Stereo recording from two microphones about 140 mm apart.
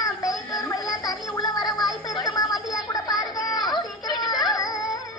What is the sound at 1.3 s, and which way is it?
Gargling, 30° left (ahead or behind).